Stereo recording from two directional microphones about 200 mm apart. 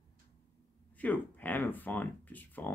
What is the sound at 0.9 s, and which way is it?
Speech, 10° left (ahead or behind).